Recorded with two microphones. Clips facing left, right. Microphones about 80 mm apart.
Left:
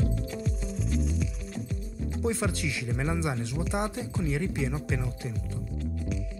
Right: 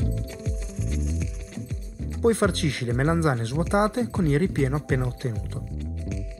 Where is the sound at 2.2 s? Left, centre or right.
Right.